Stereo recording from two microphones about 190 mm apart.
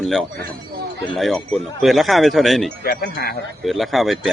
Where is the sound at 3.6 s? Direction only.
Centre (ahead or behind).